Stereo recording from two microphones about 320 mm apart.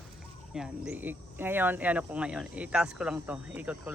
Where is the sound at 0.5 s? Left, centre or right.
Centre.